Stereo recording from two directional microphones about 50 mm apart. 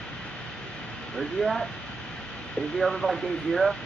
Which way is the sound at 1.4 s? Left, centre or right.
Centre.